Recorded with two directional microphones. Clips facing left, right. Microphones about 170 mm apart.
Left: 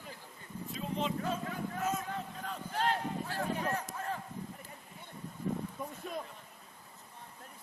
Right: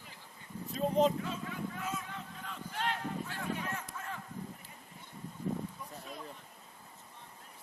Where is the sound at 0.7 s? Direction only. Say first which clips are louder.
Right 8 dB; 40° right (ahead or behind).